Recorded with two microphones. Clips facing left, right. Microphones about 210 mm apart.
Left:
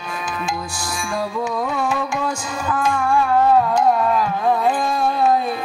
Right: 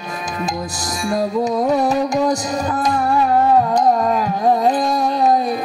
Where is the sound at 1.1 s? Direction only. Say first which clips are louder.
Right 6 dB; 40° right (ahead or behind).